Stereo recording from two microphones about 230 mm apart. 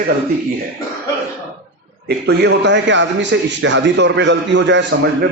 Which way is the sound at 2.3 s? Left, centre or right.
Right.